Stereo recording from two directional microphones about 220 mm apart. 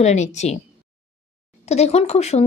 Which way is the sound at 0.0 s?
30° left (ahead or behind).